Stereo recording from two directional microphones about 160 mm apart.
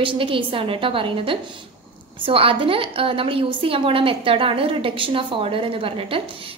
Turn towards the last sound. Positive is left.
turn(degrees=-35)  # may be behind; listen again after turning